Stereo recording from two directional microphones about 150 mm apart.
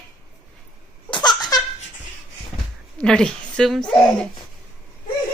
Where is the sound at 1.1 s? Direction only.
30° left (ahead or behind).